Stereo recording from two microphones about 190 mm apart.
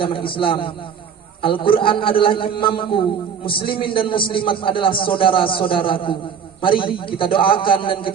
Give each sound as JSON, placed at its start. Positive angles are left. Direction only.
{"t": 0.0, "sound": "a man's voice", "side_deg": 25}